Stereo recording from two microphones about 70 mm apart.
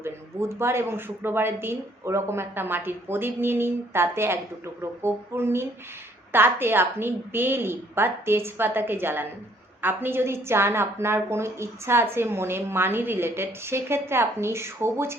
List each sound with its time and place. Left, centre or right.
0.0 s speech: right